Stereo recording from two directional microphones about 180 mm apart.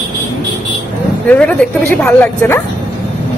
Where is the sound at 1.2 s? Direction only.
10° left (ahead or behind).